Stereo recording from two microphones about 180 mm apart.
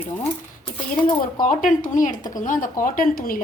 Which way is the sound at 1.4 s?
45° left (ahead or behind).